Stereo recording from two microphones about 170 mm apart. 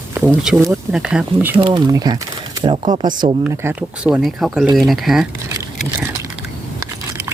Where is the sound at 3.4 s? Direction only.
10° right (ahead or behind).